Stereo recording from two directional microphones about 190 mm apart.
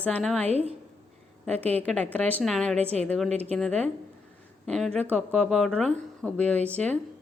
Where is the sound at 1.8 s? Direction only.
5° left (ahead or behind).